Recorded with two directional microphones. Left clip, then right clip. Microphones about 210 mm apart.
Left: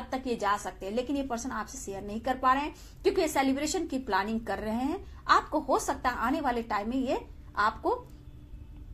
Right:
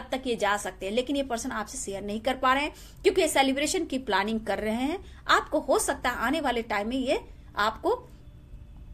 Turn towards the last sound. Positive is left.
turn(degrees=-35)  # may be behind; listen again after turning